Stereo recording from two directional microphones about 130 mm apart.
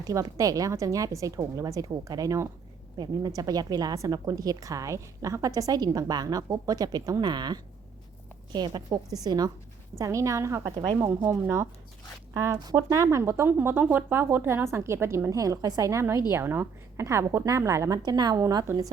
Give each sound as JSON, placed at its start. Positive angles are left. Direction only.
{"t": 0.1, "sound": "a woman's voice", "side_deg": -25}
{"t": 10.6, "sound": "a woman's voice", "side_deg": -35}
{"t": 11.3, "sound": "a woman's voice", "side_deg": -20}